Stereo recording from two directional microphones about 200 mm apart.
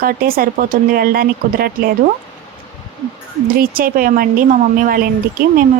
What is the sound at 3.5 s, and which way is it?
Speech, 45° right (ahead or behind).